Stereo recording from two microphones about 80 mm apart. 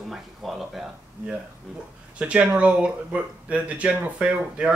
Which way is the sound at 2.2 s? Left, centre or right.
Centre.